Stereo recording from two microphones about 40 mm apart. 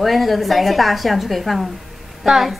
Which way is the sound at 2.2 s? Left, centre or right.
Centre.